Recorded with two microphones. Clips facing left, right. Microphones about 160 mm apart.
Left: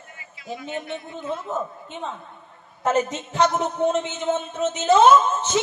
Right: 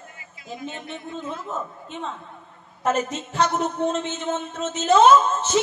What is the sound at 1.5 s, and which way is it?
Speech, 20° left (ahead or behind).